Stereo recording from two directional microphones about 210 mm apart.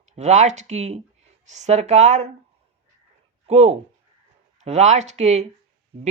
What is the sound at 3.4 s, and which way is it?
Speech, 30° right (ahead or behind).